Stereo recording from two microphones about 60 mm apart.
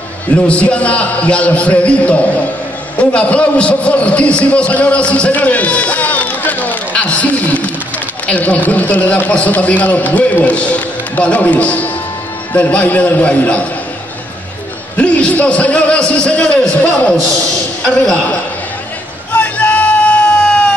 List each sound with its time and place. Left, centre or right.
0.4 s a man's voice: left
15.0 s a man's voice: centre
19.3 s hubbub: left